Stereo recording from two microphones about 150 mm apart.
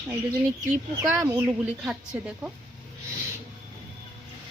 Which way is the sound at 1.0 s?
10° right (ahead or behind).